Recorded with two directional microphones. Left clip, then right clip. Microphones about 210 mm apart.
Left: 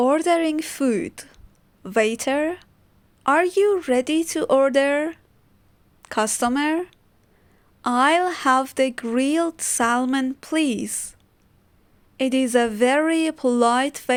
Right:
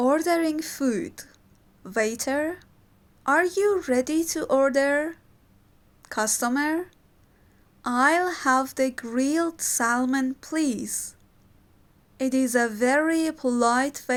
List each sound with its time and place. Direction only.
0.0 s speech: 60° left (ahead or behind)
12.1 s speech: 65° left (ahead or behind)